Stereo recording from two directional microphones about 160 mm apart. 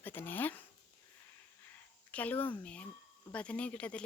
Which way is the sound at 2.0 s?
10° left (ahead or behind).